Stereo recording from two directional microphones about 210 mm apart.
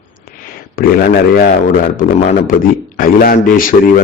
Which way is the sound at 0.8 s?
45° left (ahead or behind).